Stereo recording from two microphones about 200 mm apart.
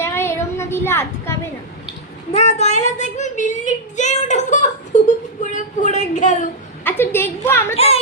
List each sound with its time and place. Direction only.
0.0 s a sound: 10° left (ahead or behind)
2.3 s child singing: 35° left (ahead or behind)
6.8 s a woman's voice: 10° left (ahead or behind)